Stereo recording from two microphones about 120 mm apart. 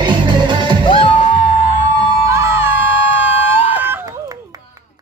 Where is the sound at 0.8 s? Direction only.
50° left (ahead or behind).